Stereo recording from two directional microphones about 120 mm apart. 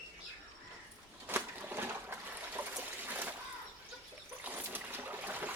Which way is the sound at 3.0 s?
15° right (ahead or behind).